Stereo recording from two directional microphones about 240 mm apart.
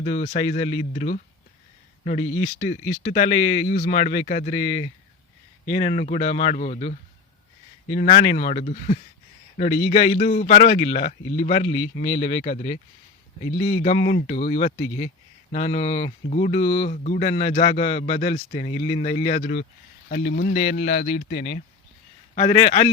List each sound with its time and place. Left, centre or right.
0.0 s speech: left
2.6 s speech: left
19.4 s speech: left
22.4 s speech: left